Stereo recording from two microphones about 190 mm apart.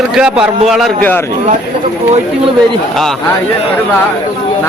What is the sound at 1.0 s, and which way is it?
Speech, 10° left (ahead or behind).